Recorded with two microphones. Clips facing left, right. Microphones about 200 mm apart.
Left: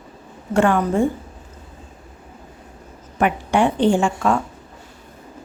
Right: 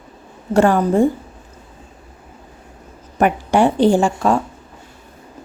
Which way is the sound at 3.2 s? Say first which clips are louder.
Right 3 dB; 40° right (ahead or behind).